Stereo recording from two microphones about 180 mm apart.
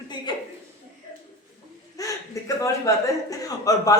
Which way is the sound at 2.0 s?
20° left (ahead or behind).